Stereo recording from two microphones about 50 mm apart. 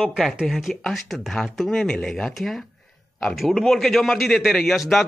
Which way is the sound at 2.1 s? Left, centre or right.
Centre.